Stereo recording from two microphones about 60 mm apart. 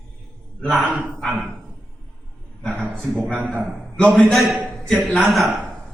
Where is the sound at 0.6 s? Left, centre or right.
Centre.